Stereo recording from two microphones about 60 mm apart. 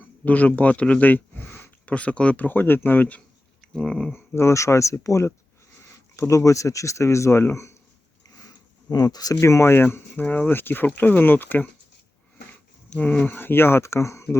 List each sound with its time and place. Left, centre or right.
0.0 s a man's voice: left
1.5 s a sound: left
1.9 s speech: left
3.6 s speech: centre
4.1 s speech: left
8.4 s a sound: left
9.4 s speech: left
10.5 s speech: left
13.0 s speech: left